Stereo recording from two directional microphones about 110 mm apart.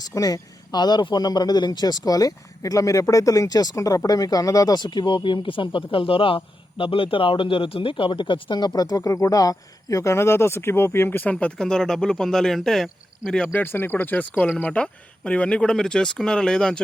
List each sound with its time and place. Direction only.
0.0 s speech: 35° left (ahead or behind); by 13.5 s 5° left (ahead or behind)
13.5 s speech: 20° left (ahead or behind)